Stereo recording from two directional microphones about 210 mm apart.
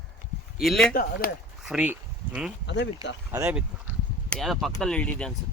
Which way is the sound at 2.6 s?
55° left (ahead or behind).